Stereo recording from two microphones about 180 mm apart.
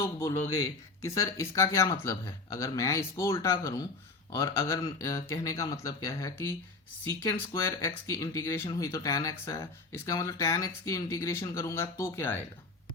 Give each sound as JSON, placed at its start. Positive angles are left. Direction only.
{"t": 0.0, "sound": "speech", "side_deg": 15}